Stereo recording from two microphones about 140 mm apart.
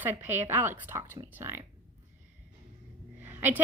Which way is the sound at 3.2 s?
15° right (ahead or behind).